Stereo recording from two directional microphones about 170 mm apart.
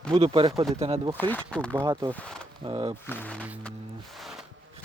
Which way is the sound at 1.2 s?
10° left (ahead or behind).